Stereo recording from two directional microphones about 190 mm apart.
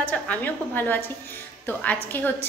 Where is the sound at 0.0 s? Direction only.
10° left (ahead or behind).